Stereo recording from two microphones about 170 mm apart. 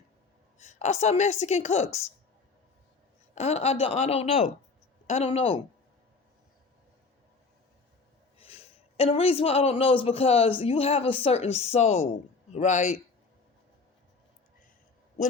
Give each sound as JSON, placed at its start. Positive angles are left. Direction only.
{"t": 0.6, "sound": "speech", "side_deg": 40}
{"t": 3.3, "sound": "speech", "side_deg": 40}
{"t": 8.4, "sound": "a man's voice", "side_deg": 35}